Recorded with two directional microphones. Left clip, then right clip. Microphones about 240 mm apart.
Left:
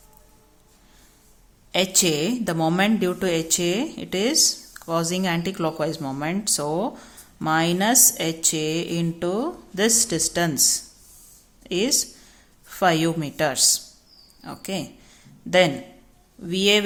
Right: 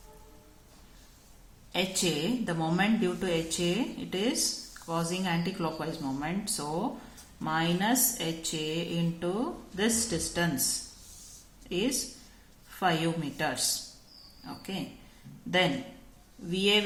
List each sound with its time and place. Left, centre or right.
1.7 s a woman's voice: left
11.7 s a woman's voice: left